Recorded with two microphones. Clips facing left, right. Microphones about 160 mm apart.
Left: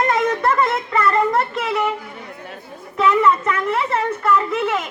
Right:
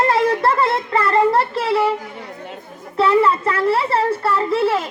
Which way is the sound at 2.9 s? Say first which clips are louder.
Right 1 dB; 30° right (ahead or behind).